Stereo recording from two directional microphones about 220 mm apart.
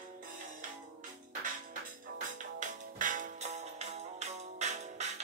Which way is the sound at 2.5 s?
35° right (ahead or behind).